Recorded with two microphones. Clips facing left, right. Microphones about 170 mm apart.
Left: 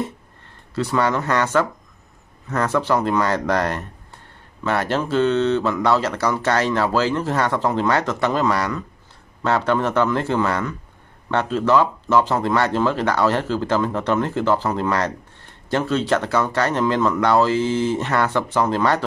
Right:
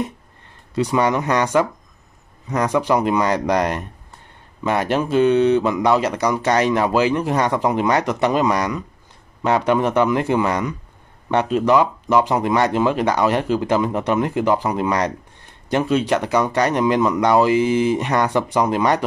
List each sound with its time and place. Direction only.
0.7 s speech: 15° right (ahead or behind)